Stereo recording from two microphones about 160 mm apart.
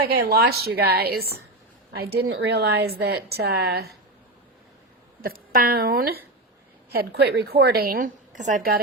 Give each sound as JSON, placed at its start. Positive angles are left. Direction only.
{"t": 0.0, "sound": "a woman's voice", "side_deg": -80}
{"t": 2.0, "sound": "a woman's voice", "side_deg": -85}
{"t": 5.2, "sound": "a woman's voice", "side_deg": -65}
{"t": 8.4, "sound": "a woman's voice", "side_deg": -55}